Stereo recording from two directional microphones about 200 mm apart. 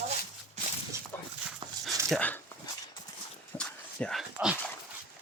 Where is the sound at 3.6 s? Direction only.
5° left (ahead or behind).